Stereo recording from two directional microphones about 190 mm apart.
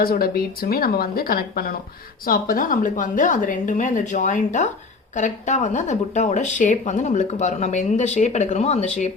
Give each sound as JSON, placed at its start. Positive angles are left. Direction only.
{"t": 0.0, "sound": "a woman's voice", "side_deg": 50}